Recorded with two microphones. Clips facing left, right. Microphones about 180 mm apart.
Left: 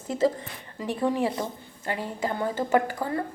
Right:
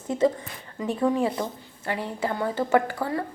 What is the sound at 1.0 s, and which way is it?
Speech, 30° left (ahead or behind).